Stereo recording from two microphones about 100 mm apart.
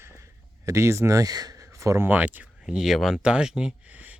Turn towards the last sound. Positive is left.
turn(degrees=-15)  # may be behind; listen again after turning